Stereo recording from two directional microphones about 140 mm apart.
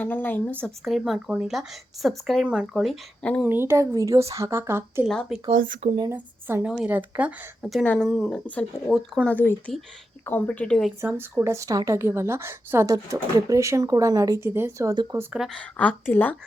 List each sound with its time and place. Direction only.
0.0 s a woman's voice: 15° left (ahead or behind)
0.9 s speech: 5° right (ahead or behind)
3.4 s a woman's voice: 15° right (ahead or behind)
5.0 s speech: centre (ahead or behind)
5.5 s speech: 75° right (ahead or behind)
6.1 s speech: 15° right (ahead or behind)
7.6 s speech: centre (ahead or behind)
9.3 s a woman's voice: 15° left (ahead or behind)
11.0 s a woman's voice: 15° right (ahead or behind)
15.4 s a woman's voice: 10° left (ahead or behind)